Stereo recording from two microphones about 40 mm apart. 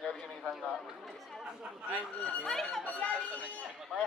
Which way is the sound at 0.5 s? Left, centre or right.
Centre.